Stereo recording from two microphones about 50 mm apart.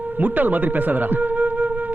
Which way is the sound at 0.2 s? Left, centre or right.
Right.